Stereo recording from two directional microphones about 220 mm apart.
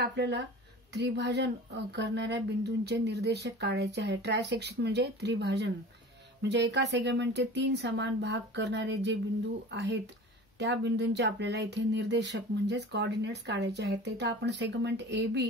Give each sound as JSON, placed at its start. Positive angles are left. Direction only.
{"t": 0.1, "sound": "speech", "side_deg": -50}